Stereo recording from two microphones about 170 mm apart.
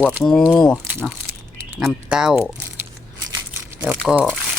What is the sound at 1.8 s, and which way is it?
Speech, centre (ahead or behind).